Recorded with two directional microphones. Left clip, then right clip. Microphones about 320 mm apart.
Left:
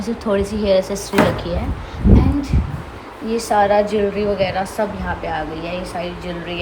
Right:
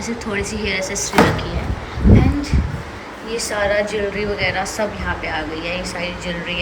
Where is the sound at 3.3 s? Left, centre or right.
Centre.